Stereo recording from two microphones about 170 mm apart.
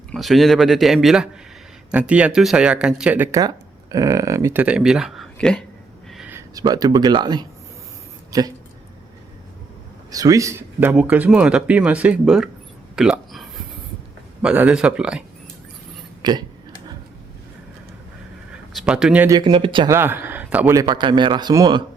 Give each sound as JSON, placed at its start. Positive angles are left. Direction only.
{"t": 0.1, "sound": "a man's voice", "side_deg": 0}
{"t": 3.3, "sound": "speech", "side_deg": -20}
{"t": 6.1, "sound": "a sound", "side_deg": 0}
{"t": 6.3, "sound": "speech", "side_deg": -20}
{"t": 10.1, "sound": "speech", "side_deg": -20}
{"t": 13.0, "sound": "a sound", "side_deg": 0}
{"t": 14.4, "sound": "a man's voice", "side_deg": -10}
{"t": 16.2, "sound": "a man's voice", "side_deg": -25}
{"t": 18.7, "sound": "speech", "side_deg": 0}
{"t": 19.3, "sound": "a man's voice", "side_deg": -25}
{"t": 19.9, "sound": "speech", "side_deg": -15}
{"t": 20.8, "sound": "a man's voice", "side_deg": -25}